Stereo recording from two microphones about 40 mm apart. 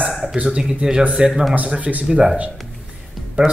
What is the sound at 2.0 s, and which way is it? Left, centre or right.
Speech, right.